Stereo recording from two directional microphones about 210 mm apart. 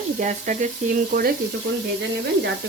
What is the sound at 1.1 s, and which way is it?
Speech, 45° right (ahead or behind).